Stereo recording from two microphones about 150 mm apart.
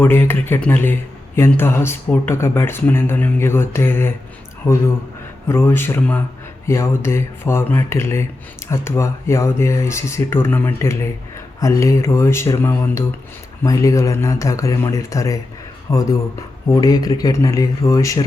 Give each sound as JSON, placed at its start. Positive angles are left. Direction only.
{"t": 0.0, "sound": "speech", "side_deg": 15}